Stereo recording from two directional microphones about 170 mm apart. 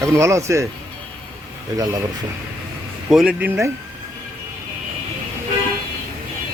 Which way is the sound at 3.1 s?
5° right (ahead or behind).